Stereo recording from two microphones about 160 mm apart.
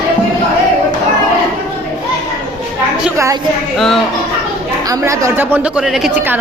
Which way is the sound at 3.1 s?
20° right (ahead or behind).